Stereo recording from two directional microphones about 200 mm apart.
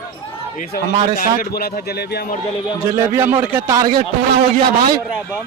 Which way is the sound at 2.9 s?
10° right (ahead or behind).